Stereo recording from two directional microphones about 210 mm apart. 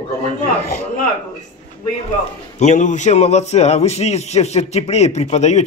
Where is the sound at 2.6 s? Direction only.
35° left (ahead or behind).